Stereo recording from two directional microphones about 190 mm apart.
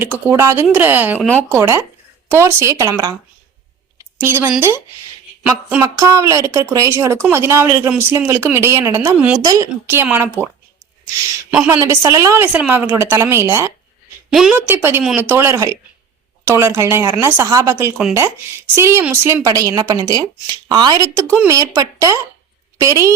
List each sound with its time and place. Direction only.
0.0 s speech: 10° right (ahead or behind)
4.2 s speech: 10° right (ahead or behind)
9.1 s a woman's voice: 5° right (ahead or behind)
9.4 s speech: 20° right (ahead or behind)
11.5 s a woman's voice: 5° right (ahead or behind)
14.3 s speech: 5° right (ahead or behind)